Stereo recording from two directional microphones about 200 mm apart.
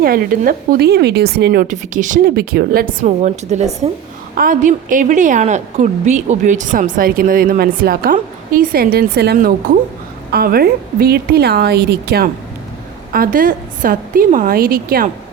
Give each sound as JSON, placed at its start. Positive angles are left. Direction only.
{"t": 0.0, "sound": "a woman's voice", "side_deg": -50}
{"t": 1.6, "sound": "a woman's voice", "side_deg": -40}